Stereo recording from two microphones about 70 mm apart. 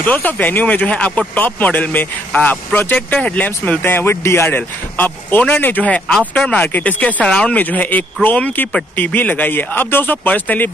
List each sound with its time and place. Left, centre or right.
0.0 s speech: left
4.5 s speech: left